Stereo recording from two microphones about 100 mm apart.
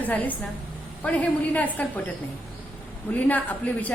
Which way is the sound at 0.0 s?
15° left (ahead or behind).